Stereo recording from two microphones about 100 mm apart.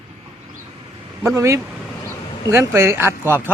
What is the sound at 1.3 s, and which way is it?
Speech, 30° right (ahead or behind).